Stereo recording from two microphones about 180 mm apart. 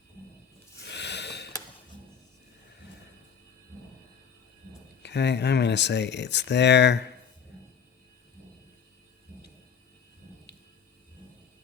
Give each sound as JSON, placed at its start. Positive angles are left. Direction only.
{"t": 0.8, "sound": "snort", "side_deg": 75}
{"t": 5.0, "sound": "speech", "side_deg": 70}